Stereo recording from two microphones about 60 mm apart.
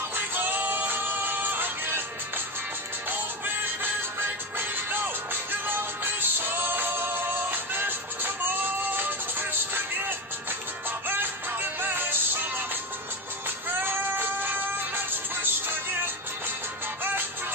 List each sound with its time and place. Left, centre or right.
0.1 s music: right
13.7 s music: right